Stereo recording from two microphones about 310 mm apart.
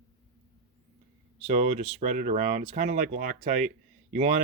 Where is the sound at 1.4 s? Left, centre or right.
Right.